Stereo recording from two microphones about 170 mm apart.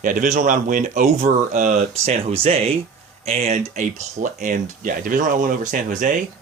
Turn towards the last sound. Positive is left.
turn(degrees=-50)  # may be behind; listen again after turning